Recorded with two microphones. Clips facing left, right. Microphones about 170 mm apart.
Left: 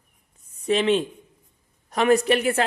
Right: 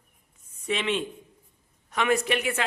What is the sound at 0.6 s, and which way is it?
A man's voice, 35° left (ahead or behind).